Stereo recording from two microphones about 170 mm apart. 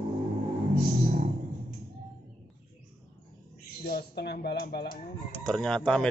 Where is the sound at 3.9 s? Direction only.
70° left (ahead or behind).